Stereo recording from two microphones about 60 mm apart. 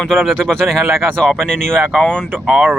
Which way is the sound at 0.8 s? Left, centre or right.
Right.